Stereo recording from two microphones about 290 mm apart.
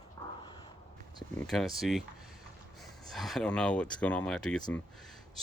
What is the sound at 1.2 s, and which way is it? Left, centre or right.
Speech, centre.